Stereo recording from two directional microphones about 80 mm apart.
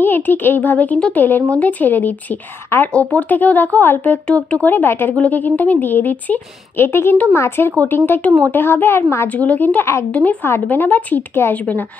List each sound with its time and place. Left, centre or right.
0.0 s speech: left
4.6 s speech: left
9.3 s speech: centre